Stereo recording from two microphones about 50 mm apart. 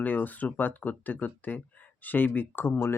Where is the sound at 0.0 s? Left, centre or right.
Left.